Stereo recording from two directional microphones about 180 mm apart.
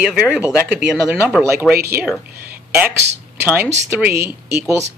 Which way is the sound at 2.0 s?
5° right (ahead or behind).